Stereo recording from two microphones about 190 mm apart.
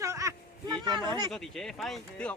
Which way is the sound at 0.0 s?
15° right (ahead or behind).